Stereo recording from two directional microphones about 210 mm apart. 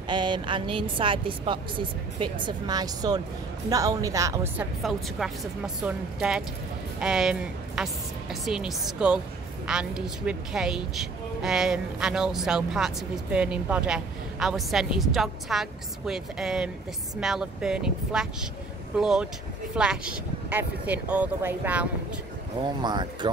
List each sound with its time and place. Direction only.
0.1 s speech: 20° right (ahead or behind)
4.8 s a woman's voice: centre (ahead or behind)
22.6 s speech: 20° right (ahead or behind)